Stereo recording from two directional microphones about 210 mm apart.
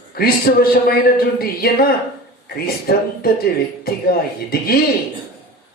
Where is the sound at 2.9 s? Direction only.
45° left (ahead or behind).